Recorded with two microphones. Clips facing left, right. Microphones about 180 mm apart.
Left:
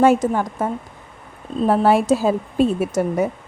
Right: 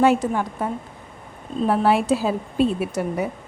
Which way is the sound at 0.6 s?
45° left (ahead or behind).